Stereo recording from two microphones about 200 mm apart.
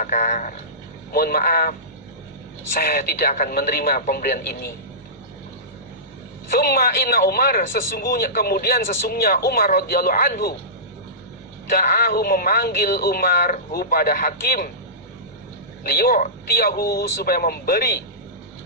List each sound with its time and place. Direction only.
0.0 s a man's voice: 40° left (ahead or behind)
2.7 s a man's voice: 50° left (ahead or behind)
6.5 s a man's voice: 50° left (ahead or behind)
11.7 s a man's voice: 50° left (ahead or behind)
15.8 s a man's voice: 50° left (ahead or behind)